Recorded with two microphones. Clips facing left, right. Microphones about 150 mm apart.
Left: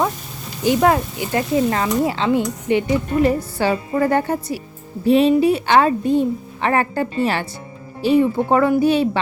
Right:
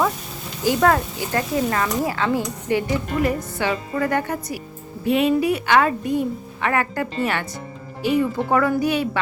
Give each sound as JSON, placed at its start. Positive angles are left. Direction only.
{"t": 0.6, "sound": "speech", "side_deg": 20}